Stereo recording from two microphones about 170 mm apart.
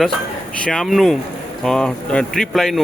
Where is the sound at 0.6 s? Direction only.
5° left (ahead or behind).